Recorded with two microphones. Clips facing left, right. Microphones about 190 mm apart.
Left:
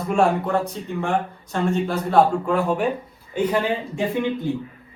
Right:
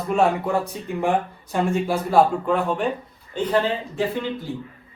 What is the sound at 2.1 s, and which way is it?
Speech, 5° right (ahead or behind).